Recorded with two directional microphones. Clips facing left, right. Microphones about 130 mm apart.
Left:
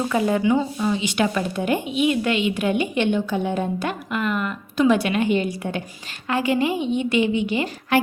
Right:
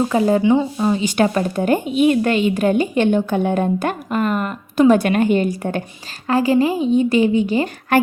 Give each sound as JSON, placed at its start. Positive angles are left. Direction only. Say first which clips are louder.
{"t": 0.1, "sound": "a woman's voice", "louder": "right 2 dB", "side_deg": -30}
{"t": 6.2, "sound": "a woman's voice", "louder": "right 5 dB", "side_deg": -35}